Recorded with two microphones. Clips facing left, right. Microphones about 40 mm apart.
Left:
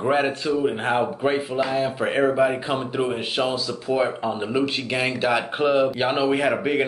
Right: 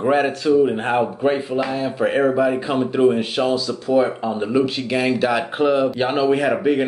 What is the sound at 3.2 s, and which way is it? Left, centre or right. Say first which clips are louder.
Speech: right 4 dB; left.